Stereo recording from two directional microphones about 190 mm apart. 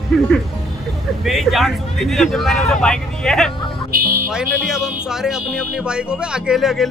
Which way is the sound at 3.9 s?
50° right (ahead or behind).